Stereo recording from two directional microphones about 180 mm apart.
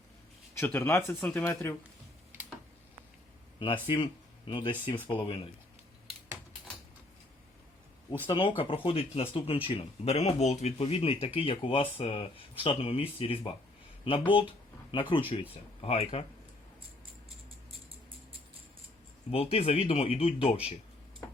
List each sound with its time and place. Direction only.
0.6 s speech: 10° left (ahead or behind)
3.8 s speech: 25° left (ahead or behind)
8.3 s speech: 30° left (ahead or behind)
19.3 s speech: 35° left (ahead or behind)